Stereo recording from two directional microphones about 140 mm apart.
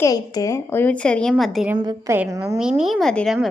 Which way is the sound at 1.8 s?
30° right (ahead or behind).